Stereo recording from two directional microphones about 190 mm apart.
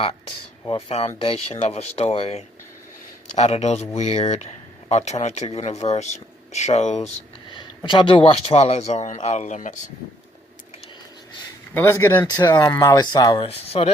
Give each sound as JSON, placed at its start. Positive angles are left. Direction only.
{"t": 0.7, "sound": "speech", "side_deg": 30}
{"t": 7.5, "sound": "speech", "side_deg": 25}
{"t": 11.7, "sound": "speech", "side_deg": 15}